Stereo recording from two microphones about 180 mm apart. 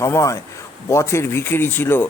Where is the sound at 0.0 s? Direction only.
15° left (ahead or behind).